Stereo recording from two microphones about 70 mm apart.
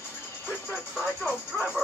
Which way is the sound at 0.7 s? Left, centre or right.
Centre.